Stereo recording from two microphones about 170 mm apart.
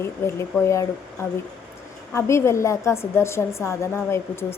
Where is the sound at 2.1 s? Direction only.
15° left (ahead or behind).